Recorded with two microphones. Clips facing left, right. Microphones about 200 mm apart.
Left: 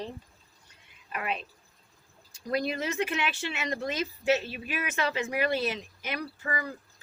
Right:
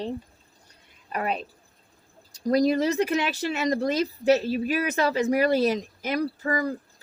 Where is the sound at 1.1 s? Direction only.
40° right (ahead or behind).